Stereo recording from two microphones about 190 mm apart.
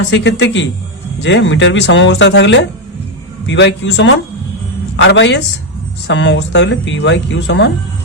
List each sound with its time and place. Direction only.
0.1 s speech: 70° left (ahead or behind)